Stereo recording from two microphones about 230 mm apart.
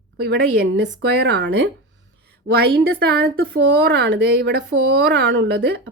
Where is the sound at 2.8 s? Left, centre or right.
Right.